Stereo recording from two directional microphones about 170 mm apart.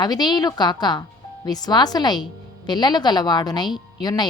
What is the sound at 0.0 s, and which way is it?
Speech, 25° left (ahead or behind).